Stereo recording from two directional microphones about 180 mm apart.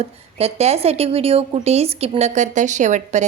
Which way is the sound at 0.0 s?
35° right (ahead or behind).